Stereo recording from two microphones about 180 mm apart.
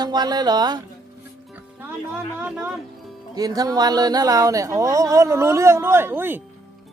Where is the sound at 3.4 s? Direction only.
20° right (ahead or behind).